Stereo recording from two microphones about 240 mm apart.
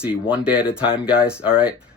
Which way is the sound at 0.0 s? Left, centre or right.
Centre.